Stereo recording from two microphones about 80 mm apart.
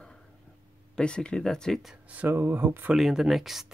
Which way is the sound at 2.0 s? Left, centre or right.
Centre.